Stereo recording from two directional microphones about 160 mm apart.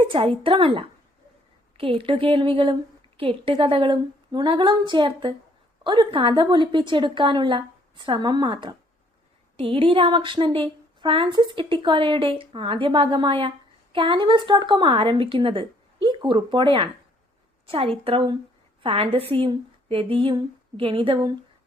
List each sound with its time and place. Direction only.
0.1 s a woman's voice: 35° right (ahead or behind)